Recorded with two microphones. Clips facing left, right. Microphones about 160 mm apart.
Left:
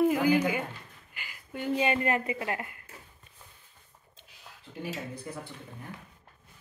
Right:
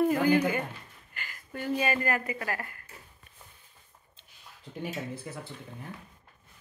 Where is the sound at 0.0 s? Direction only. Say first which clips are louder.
Even; 10° left (ahead or behind).